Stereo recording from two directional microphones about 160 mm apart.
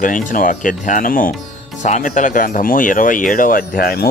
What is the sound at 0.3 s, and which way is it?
A man's voice, 55° left (ahead or behind).